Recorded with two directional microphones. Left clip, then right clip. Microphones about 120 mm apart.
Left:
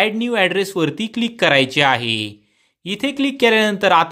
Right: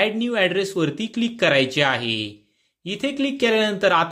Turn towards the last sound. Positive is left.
turn(degrees=40)  # may be behind; listen again after turning